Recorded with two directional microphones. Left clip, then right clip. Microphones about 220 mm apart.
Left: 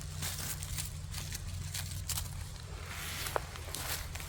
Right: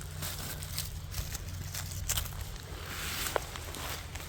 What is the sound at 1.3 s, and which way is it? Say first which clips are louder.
Vehicle: right 1 dB; 10° right (ahead or behind).